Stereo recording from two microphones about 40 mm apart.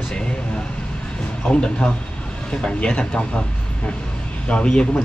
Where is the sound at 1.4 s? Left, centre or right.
Left.